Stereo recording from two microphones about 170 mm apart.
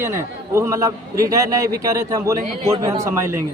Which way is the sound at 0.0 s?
15° right (ahead or behind).